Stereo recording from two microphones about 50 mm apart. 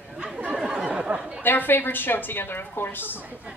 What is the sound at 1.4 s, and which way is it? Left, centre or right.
A woman's voice, left.